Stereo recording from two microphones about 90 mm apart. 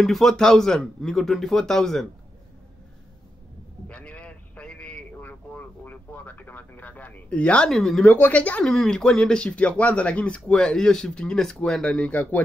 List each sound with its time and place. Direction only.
0.0 s speech: centre (ahead or behind)
3.8 s a sound: 15° left (ahead or behind)
8.0 s speech: 20° left (ahead or behind)